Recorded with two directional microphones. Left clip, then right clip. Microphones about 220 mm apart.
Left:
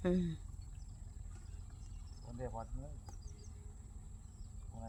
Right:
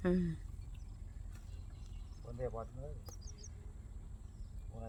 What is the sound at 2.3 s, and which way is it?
Speech, 35° right (ahead or behind).